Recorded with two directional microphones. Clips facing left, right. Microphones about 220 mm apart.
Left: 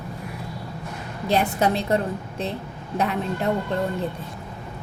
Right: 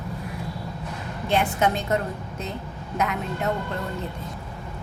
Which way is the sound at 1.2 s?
35° left (ahead or behind).